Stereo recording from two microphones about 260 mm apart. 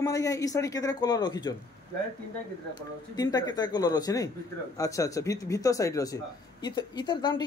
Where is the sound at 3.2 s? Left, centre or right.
Centre.